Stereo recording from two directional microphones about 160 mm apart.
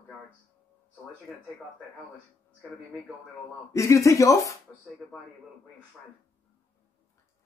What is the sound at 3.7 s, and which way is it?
Speech, 20° left (ahead or behind).